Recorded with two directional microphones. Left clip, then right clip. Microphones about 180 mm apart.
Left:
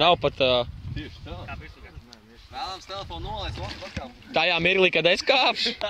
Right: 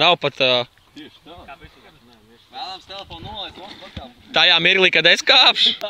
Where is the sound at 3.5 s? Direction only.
15° left (ahead or behind).